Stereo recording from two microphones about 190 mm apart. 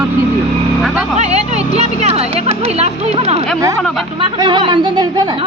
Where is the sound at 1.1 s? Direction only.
35° right (ahead or behind).